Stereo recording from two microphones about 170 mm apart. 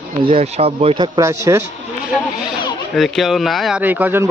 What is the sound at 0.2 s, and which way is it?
Speech, 30° right (ahead or behind).